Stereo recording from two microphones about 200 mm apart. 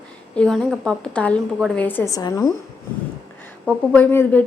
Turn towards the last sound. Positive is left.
turn(degrees=10)  # may be behind; listen again after turning